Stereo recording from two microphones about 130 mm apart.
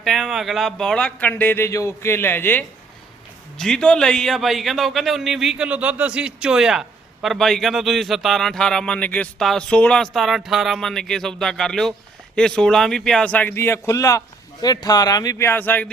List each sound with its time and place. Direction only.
0.0 s speech: centre (ahead or behind)